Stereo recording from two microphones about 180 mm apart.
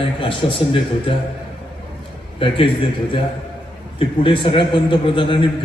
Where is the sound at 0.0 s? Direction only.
30° left (ahead or behind).